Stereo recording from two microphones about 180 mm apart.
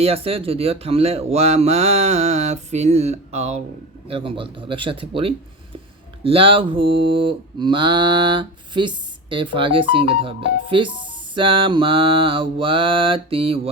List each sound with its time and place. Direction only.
0.0 s speech: 30° right (ahead or behind)